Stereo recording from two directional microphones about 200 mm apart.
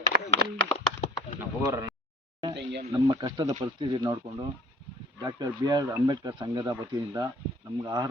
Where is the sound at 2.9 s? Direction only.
20° right (ahead or behind).